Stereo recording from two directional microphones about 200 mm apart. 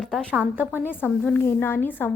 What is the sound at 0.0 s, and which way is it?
Speech, centre (ahead or behind).